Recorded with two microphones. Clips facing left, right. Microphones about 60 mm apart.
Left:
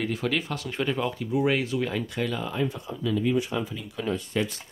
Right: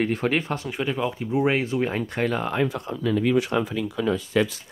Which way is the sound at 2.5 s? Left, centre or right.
Right.